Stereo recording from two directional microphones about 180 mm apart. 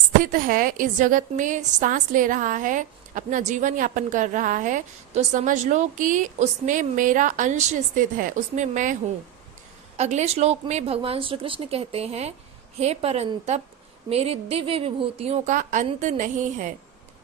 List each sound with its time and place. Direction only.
0.2 s a woman's voice: 50° right (ahead or behind)
10.0 s a woman's voice: 40° right (ahead or behind)